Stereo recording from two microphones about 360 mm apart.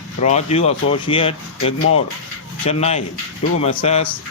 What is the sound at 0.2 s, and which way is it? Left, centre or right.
Speech, centre.